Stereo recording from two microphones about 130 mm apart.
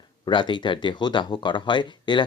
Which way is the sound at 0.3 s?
40° left (ahead or behind).